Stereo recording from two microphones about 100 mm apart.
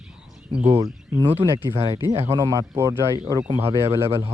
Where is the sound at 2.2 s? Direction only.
35° right (ahead or behind).